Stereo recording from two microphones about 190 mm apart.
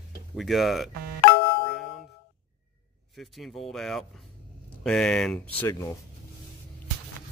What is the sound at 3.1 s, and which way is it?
Speech, centre (ahead or behind).